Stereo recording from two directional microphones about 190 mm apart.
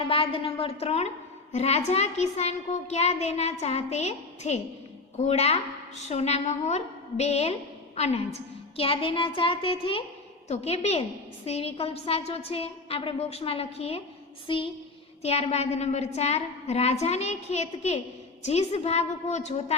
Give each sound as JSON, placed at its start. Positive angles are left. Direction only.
{"t": 0.0, "sound": "a child's voice", "side_deg": 30}